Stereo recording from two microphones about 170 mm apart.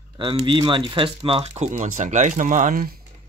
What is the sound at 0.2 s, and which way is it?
Speech, 30° right (ahead or behind).